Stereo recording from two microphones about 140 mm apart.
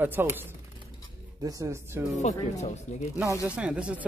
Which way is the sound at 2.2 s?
55° left (ahead or behind).